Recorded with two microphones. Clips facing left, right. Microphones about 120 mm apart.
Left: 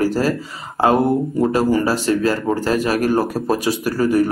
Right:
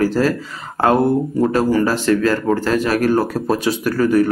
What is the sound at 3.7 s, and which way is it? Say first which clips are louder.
Speech: right 1 dB; 40° left (ahead or behind).